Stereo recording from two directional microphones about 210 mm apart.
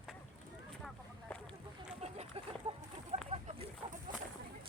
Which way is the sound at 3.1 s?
35° right (ahead or behind).